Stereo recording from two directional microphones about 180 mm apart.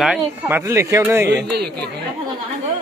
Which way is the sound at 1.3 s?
65° right (ahead or behind).